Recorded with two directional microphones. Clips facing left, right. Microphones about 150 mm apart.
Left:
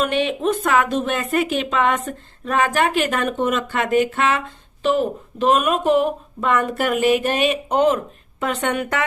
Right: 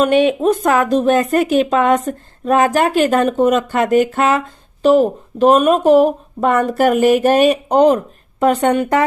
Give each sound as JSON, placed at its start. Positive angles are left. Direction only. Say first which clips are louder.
{"t": 0.0, "sound": "speech", "louder": "right 7 dB", "side_deg": -45}